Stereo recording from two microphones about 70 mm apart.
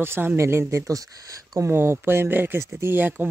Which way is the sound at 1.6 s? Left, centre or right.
Right.